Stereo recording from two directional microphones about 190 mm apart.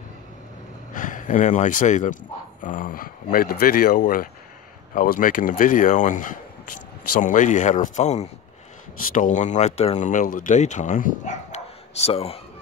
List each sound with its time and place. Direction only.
0.9 s speech: 45° left (ahead or behind)